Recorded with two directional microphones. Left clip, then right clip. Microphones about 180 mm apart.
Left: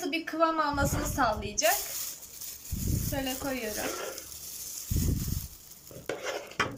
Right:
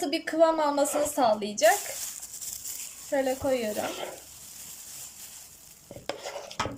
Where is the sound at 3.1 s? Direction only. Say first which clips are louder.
Right 8 dB; 30° right (ahead or behind).